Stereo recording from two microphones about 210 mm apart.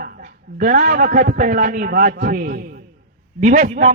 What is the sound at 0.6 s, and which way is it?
A man's voice, 40° right (ahead or behind).